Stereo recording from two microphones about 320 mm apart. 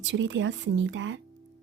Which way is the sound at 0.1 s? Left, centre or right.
Right.